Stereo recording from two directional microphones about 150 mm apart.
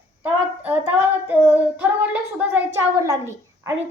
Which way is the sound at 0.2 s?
10° right (ahead or behind).